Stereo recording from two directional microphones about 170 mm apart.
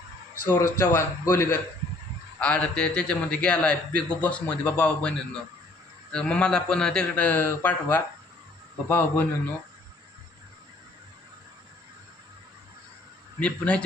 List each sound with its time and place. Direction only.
0.4 s a man's voice: 15° left (ahead or behind)
13.4 s a man's voice: 5° left (ahead or behind)